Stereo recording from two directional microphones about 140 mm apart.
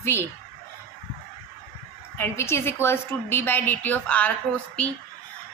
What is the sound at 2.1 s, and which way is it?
A woman's voice, 20° left (ahead or behind).